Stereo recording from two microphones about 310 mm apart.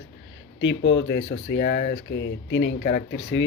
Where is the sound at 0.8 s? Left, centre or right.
Left.